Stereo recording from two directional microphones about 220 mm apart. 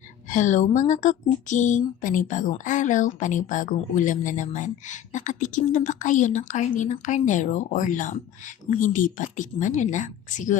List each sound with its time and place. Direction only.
0.3 s speech: 35° left (ahead or behind)